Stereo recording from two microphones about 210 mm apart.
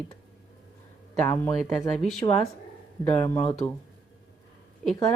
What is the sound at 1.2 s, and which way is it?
A woman's voice, 10° left (ahead or behind).